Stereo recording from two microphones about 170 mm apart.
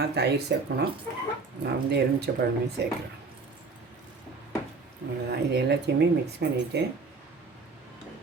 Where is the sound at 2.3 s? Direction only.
70° right (ahead or behind).